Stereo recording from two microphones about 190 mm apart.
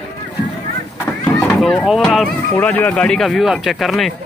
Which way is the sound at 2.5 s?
10° left (ahead or behind).